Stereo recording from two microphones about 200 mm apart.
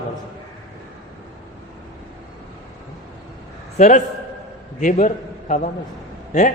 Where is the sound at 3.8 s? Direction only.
35° left (ahead or behind).